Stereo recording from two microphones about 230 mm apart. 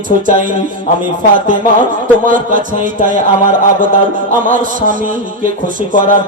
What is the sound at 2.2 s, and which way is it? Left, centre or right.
Music, right.